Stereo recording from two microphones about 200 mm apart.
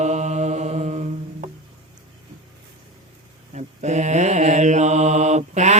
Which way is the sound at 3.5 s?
35° right (ahead or behind).